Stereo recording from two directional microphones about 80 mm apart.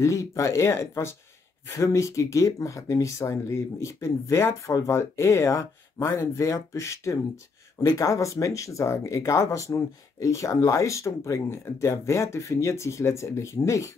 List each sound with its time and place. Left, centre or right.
0.0 s speech: left